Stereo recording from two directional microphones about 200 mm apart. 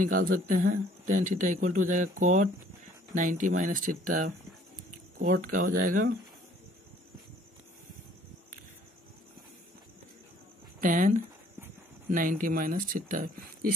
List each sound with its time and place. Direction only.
0.0 s speech: 45° right (ahead or behind)
5.3 s speech: 45° right (ahead or behind)
10.8 s speech: 40° right (ahead or behind)